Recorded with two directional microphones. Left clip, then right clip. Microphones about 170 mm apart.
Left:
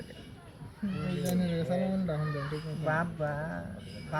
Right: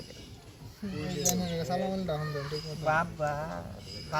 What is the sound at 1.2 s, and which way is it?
Speech, 30° right (ahead or behind).